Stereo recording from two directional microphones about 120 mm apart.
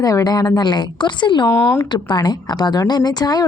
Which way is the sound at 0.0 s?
30° left (ahead or behind).